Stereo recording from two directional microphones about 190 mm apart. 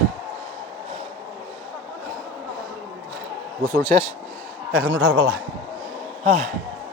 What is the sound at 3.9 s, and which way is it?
Speech, 40° right (ahead or behind).